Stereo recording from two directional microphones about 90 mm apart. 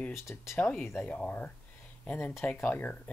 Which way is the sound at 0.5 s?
15° left (ahead or behind).